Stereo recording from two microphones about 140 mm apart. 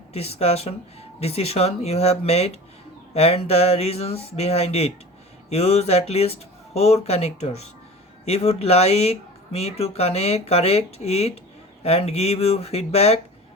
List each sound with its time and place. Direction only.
0.1 s speech: 50° left (ahead or behind)